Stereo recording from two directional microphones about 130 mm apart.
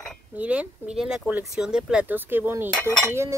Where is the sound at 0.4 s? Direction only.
10° right (ahead or behind).